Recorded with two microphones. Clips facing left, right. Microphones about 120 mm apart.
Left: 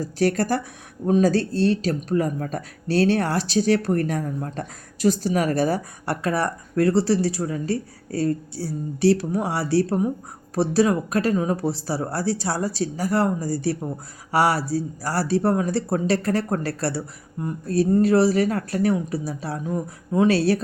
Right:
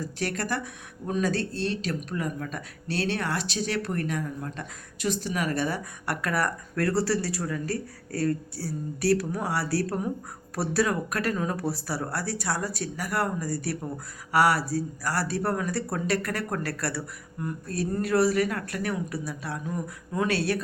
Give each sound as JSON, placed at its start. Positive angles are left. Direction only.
{"t": 0.0, "sound": "speech", "side_deg": 40}